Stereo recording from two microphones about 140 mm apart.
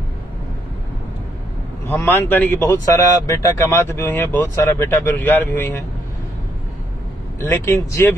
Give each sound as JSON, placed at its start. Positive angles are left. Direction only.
{"t": 1.9, "sound": "speech", "side_deg": 20}
{"t": 7.3, "sound": "speech", "side_deg": 15}